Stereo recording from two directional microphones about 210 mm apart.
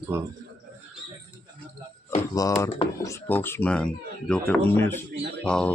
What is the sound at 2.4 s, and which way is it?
Speech, 15° left (ahead or behind).